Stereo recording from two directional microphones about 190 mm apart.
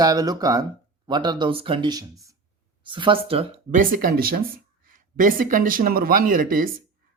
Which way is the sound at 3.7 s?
45° right (ahead or behind).